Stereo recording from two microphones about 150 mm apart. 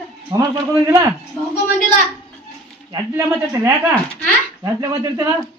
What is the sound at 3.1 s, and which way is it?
Speech, 15° right (ahead or behind).